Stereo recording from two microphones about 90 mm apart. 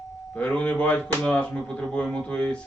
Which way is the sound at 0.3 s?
15° left (ahead or behind).